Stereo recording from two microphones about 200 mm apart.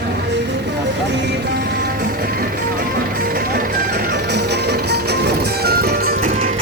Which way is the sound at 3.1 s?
45° right (ahead or behind).